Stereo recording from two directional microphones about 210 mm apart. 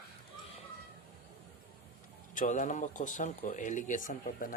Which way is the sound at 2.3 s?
35° left (ahead or behind).